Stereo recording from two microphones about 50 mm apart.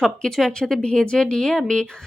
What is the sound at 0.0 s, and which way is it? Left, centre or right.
Speech, centre.